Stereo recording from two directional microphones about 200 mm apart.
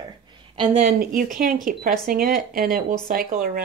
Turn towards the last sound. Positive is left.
turn(degrees=-45)  # may be behind; listen again after turning